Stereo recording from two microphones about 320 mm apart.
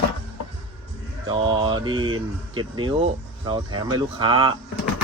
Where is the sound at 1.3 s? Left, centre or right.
Centre.